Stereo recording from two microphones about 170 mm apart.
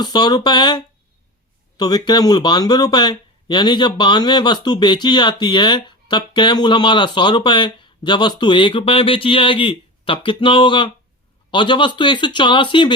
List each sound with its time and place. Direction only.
0.0 s speech: 25° left (ahead or behind)